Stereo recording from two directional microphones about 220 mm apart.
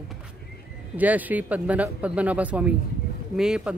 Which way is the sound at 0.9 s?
5° right (ahead or behind).